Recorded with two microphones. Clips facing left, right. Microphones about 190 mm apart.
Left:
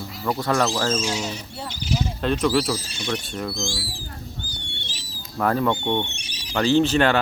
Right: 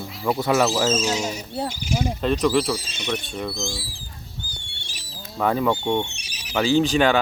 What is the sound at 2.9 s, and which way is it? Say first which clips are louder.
Speech: even; 20° right (ahead or behind).